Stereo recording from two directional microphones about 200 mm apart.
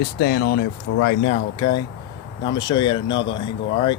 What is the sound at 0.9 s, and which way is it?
Speech, 80° left.